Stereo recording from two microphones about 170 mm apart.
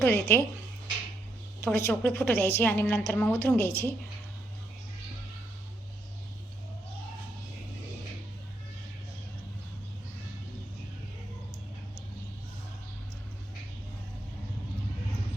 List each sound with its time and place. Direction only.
0.0 s a woman's voice: 10° left (ahead or behind)
1.6 s a woman's voice: 10° left (ahead or behind)